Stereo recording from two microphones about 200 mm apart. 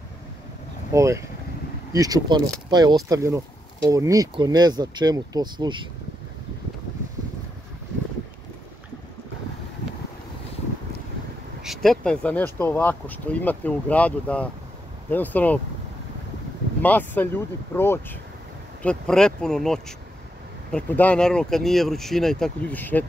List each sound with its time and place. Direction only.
0.9 s speech: 15° right (ahead or behind)
11.6 s speech: centre (ahead or behind)
16.8 s speech: 10° left (ahead or behind)